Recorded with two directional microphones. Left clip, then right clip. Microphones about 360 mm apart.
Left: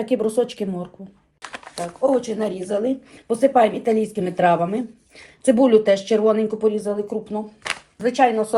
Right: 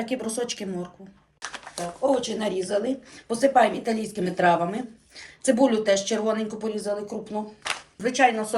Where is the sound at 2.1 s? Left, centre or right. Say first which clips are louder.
Left 3 dB; centre.